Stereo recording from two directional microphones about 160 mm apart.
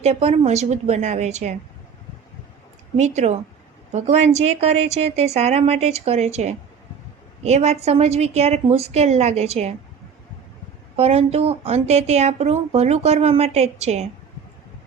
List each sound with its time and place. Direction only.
0.0 s a woman's voice: 40° right (ahead or behind)
3.0 s a woman's voice: 45° right (ahead or behind)
10.9 s speech: 40° right (ahead or behind)